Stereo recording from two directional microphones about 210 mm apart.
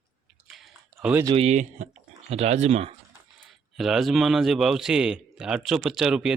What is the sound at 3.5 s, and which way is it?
A man's voice, centre (ahead or behind).